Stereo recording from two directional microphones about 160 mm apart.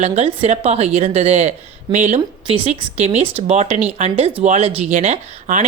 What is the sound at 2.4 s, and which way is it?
A woman's voice, 35° right (ahead or behind).